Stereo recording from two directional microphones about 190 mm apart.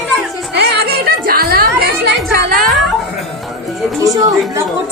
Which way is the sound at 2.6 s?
Centre (ahead or behind).